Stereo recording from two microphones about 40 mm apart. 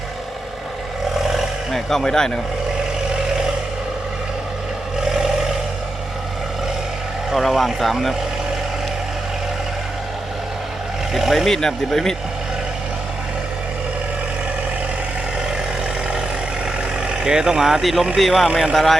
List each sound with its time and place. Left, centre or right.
1.7 s speech: centre
4.9 s vehicle: centre
7.3 s speech: centre
11.1 s speech: centre
11.4 s speech: centre
17.1 s speech: right; by 18.4 s centre
18.4 s speech: right
18.7 s speech: centre